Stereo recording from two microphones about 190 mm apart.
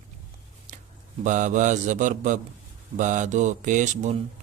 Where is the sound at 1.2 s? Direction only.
40° right (ahead or behind).